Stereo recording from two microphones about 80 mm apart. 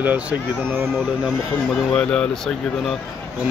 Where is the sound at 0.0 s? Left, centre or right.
Right.